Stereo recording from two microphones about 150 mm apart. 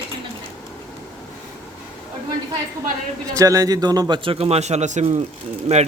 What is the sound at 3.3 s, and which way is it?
A man's voice, 20° right (ahead or behind).